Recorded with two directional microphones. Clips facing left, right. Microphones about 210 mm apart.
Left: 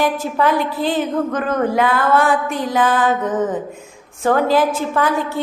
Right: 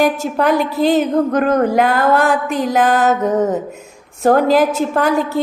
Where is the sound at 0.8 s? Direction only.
40° right (ahead or behind).